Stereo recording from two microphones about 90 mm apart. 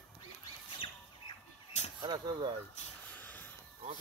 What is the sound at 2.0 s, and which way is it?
Speech, 55° right (ahead or behind).